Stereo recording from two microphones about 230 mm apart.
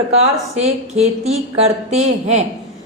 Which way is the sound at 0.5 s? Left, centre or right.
Right.